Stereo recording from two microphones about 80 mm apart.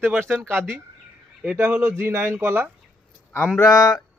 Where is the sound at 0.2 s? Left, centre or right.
Right.